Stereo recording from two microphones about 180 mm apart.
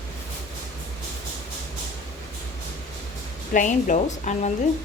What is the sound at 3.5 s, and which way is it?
A woman's voice, 45° left (ahead or behind).